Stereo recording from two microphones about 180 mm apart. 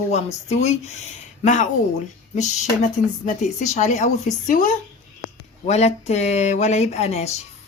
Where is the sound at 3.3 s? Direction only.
40° left (ahead or behind).